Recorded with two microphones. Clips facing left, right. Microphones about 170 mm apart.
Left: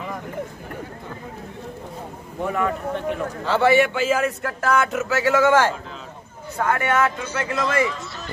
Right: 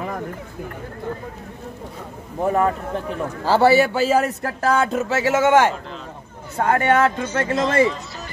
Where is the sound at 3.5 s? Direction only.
35° right (ahead or behind).